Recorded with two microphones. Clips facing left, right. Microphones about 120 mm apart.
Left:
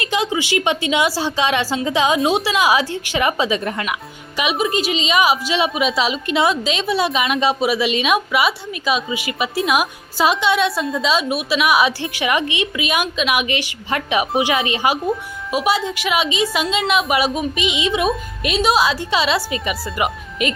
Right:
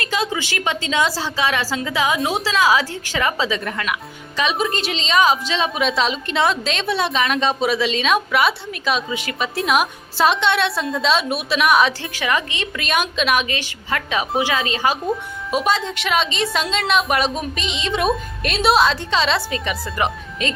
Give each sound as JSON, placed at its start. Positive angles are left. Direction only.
{"t": 0.0, "sound": "a woman's voice", "side_deg": 15}
{"t": 4.4, "sound": "a woman's voice", "side_deg": 5}
{"t": 12.0, "sound": "a woman's voice", "side_deg": 15}
{"t": 15.0, "sound": "a woman's voice", "side_deg": 0}